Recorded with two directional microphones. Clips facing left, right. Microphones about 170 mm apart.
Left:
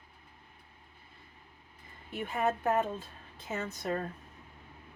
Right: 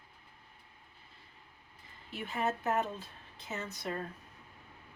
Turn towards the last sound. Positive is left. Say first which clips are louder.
# left 4 dB
turn(degrees=45)  # may be behind; listen again after turning